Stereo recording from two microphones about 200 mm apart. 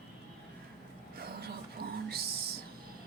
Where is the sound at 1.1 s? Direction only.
50° right (ahead or behind).